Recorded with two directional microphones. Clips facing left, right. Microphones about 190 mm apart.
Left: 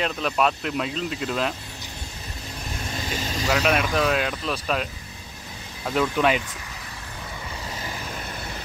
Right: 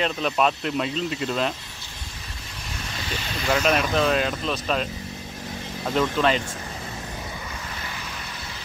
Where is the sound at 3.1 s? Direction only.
40° left (ahead or behind).